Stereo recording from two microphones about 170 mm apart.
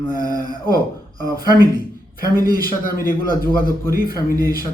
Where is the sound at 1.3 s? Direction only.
60° left (ahead or behind).